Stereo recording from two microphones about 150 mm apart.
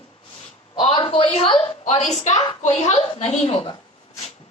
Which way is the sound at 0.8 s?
40° left (ahead or behind).